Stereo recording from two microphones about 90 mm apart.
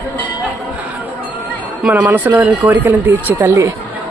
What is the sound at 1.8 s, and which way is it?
Speech, 20° right (ahead or behind).